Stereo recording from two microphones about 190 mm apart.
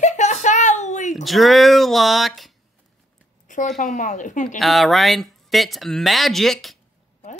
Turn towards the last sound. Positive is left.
turn(degrees=0)  # may be behind; listen again after turning